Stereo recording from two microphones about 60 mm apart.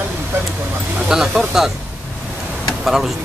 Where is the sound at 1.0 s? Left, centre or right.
Centre.